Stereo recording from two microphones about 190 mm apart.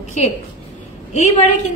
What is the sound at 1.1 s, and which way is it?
Speech, 40° left (ahead or behind).